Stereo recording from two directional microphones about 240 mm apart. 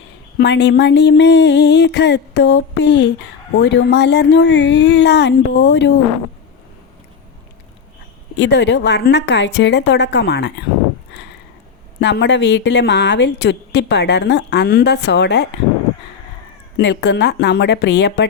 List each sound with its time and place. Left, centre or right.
0.3 s a woman's voice: left
8.4 s a woman's voice: left
11.9 s a woman's voice: left
16.7 s a woman's voice: left